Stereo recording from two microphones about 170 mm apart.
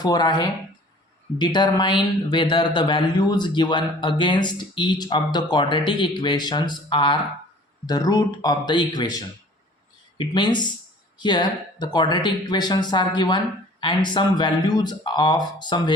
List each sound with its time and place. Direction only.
0.0 s speech: 25° left (ahead or behind)